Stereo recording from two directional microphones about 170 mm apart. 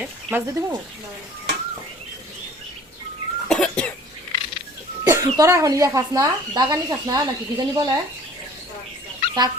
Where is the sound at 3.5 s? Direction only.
5° left (ahead or behind).